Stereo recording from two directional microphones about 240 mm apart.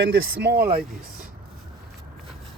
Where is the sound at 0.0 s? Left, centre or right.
Right.